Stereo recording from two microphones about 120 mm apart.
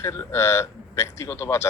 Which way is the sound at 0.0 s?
25° left (ahead or behind).